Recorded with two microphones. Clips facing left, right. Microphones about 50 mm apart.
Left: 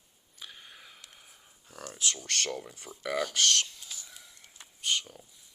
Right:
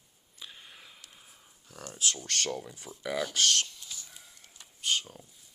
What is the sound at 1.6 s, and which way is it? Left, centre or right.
Speech, left.